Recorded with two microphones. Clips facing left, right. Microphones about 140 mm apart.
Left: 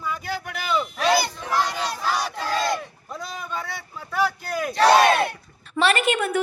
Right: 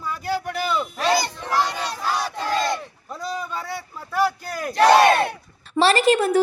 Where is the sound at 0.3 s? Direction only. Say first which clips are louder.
Right 6 dB; 35° right (ahead or behind).